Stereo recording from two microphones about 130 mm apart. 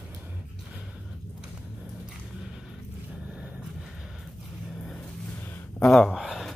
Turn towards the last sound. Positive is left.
turn(degrees=0)  # may be behind; listen again after turning